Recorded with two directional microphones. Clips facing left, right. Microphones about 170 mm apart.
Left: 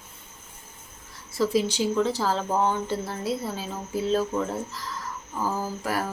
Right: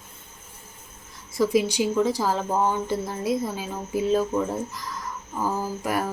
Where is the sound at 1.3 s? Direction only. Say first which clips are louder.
Right 2 dB; 15° right (ahead or behind).